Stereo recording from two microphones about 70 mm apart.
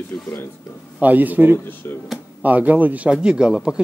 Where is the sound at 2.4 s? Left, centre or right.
Right.